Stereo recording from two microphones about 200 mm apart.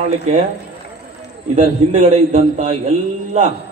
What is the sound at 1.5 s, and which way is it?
A man's voice, 35° right (ahead or behind).